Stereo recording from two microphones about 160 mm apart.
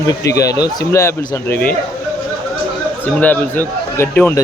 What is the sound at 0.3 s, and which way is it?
Speech, 20° left (ahead or behind).